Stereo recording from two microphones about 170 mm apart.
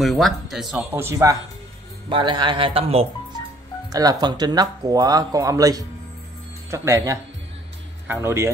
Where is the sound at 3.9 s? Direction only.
20° right (ahead or behind).